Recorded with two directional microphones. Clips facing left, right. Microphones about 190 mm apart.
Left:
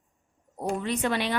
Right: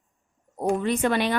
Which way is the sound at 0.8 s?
50° right (ahead or behind).